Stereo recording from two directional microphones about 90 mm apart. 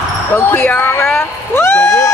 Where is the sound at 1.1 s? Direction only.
25° left (ahead or behind).